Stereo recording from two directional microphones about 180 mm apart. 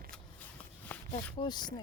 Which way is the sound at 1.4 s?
25° left (ahead or behind).